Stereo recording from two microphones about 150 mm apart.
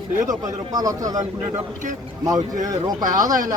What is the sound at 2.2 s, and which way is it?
Speech, 25° right (ahead or behind).